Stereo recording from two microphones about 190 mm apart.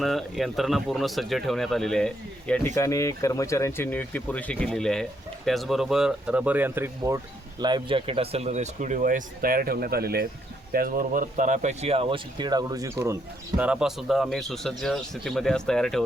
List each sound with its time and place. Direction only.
0.0 s speech: centre (ahead or behind)
2.7 s speech: 15° left (ahead or behind); by 7.2 s 15° right (ahead or behind)
7.6 s speech: 25° right (ahead or behind)
13.6 s speech: 5° right (ahead or behind)